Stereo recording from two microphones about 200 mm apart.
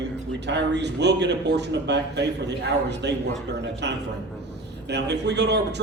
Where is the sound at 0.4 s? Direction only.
60° right (ahead or behind).